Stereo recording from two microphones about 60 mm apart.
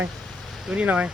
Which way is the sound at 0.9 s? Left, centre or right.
Centre.